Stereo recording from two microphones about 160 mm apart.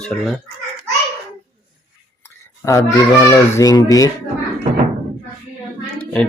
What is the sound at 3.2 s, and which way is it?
Speech, 20° left (ahead or behind).